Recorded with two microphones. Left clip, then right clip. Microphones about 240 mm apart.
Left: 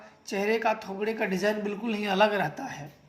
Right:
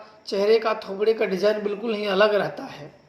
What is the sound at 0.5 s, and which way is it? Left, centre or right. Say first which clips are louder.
Speech: right 5 dB; left.